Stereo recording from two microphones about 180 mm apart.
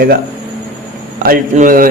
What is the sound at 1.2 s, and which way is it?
Speech, 50° right (ahead or behind).